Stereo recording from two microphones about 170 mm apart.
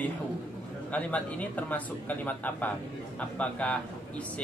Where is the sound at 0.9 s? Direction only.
10° left (ahead or behind).